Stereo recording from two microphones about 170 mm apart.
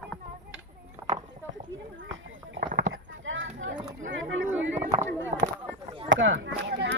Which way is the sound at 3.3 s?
90° right.